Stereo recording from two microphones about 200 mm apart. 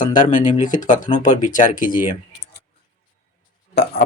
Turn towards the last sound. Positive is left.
turn(degrees=55)  # may be behind; listen again after turning